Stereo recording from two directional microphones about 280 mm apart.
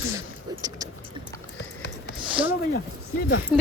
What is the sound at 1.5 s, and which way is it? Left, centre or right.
Music, left.